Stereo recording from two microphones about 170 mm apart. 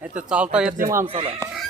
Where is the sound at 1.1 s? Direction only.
35° right (ahead or behind).